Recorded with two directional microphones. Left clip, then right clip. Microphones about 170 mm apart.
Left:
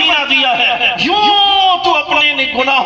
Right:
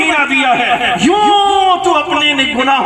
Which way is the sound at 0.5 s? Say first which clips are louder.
Even; centre (ahead or behind).